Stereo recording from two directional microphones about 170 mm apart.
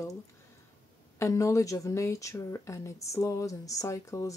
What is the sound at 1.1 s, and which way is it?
Speech, 15° left (ahead or behind).